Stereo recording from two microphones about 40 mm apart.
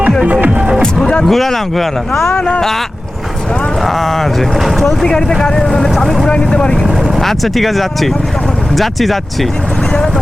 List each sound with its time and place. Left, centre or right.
0.5 s music: right
1.2 s speech: centre
3.8 s speech: centre
6.2 s speech: left
7.2 s speech: centre